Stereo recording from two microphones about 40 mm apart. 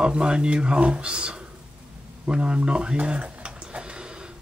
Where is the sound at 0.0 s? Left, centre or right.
Right.